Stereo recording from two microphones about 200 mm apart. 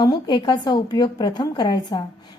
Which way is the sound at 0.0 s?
20° left (ahead or behind).